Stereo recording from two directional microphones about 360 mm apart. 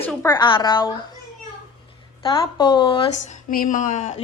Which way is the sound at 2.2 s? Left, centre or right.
Centre.